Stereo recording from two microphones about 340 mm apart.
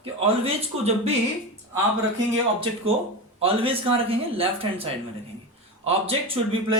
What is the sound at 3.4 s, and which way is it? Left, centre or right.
A man's voice, centre.